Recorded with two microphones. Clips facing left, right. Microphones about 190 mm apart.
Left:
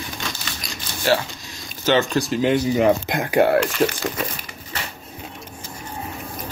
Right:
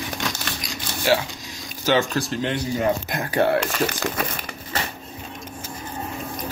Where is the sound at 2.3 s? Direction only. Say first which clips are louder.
Left 6 dB; 10° left (ahead or behind).